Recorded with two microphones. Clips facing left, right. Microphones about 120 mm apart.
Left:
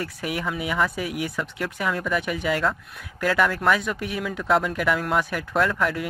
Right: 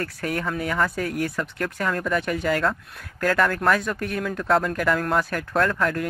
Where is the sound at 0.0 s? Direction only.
10° left (ahead or behind).